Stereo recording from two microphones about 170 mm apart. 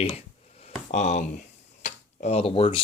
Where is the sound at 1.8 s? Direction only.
40° left (ahead or behind).